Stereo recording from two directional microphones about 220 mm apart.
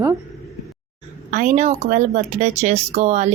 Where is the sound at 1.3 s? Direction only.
35° right (ahead or behind).